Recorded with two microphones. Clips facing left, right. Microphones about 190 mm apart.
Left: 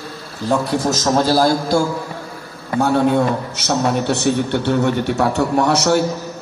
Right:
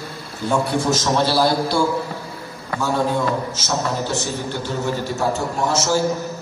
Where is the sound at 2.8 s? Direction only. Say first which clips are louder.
Left 6 dB; 60° left (ahead or behind).